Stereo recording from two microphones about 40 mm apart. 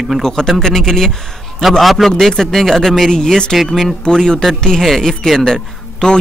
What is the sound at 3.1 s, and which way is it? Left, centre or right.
Speech, centre.